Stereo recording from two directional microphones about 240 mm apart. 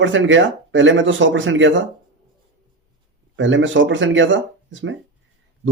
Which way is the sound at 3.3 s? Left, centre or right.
Right.